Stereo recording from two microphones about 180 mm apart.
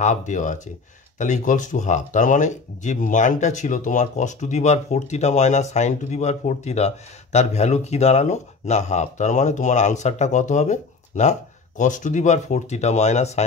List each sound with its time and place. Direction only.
0.0 s speech: 45° left (ahead or behind)